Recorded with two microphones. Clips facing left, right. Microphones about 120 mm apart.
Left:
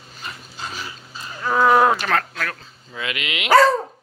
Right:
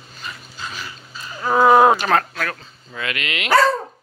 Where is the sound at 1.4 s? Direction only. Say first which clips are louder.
Right 3 dB; 20° right (ahead or behind).